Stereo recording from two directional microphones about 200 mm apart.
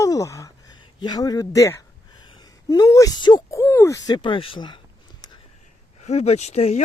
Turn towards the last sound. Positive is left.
turn(degrees=35)  # may be behind; listen again after turning